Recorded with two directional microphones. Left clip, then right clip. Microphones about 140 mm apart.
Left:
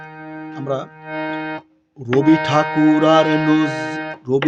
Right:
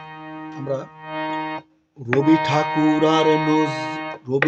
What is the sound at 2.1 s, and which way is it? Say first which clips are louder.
Music: left 3 dB; 45° left (ahead or behind).